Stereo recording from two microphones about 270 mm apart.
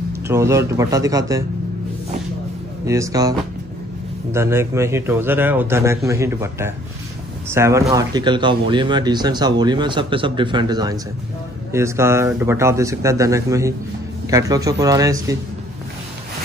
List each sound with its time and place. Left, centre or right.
0.3 s speech: centre
2.9 s speech: centre